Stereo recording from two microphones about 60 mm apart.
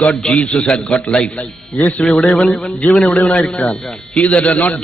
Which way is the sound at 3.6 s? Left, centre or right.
Left.